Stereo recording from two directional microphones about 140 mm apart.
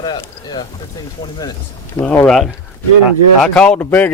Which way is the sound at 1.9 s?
15° left (ahead or behind).